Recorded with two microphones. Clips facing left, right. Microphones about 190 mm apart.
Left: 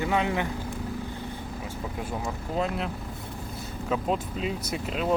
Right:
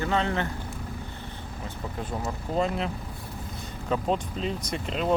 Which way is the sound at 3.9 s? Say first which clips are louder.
Right 1 dB; 5° left (ahead or behind).